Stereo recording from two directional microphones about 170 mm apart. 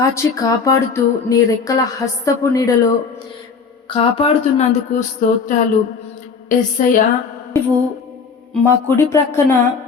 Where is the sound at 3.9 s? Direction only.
30° left (ahead or behind).